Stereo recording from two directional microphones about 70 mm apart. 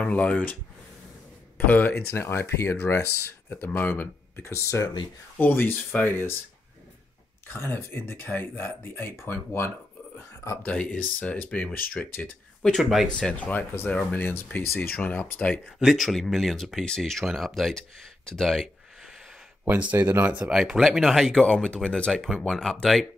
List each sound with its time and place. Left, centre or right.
0.0 s speech: centre
1.7 s speech: left
2.0 s speech: left
5.4 s speech: left
7.4 s speech: left
10.6 s speech: centre
12.6 s speech: centre
13.1 s speech: centre
15.6 s speech: centre
19.8 s speech: right
20.5 s speech: centre
21.3 s speech: centre